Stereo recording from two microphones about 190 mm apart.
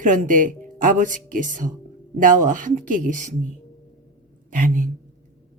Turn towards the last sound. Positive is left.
turn(degrees=-45)  # may be behind; listen again after turning